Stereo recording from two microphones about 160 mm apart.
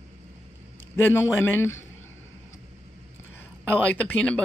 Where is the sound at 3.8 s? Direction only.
10° left (ahead or behind).